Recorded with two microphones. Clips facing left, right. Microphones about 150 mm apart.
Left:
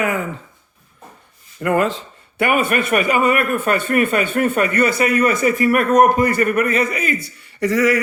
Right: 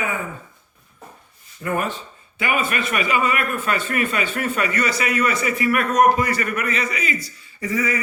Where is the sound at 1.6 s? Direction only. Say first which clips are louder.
Left 7 dB; 90° left.